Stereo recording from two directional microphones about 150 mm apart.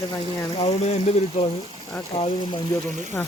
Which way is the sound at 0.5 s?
45° left (ahead or behind).